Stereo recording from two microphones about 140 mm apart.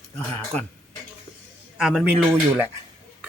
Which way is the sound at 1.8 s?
5° right (ahead or behind).